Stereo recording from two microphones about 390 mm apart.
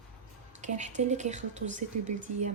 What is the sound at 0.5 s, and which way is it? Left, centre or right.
Speech, centre.